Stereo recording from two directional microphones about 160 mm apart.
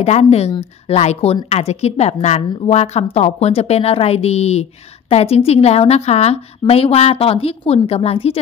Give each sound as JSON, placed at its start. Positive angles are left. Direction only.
{"t": 0.0, "sound": "a woman's voice", "side_deg": 40}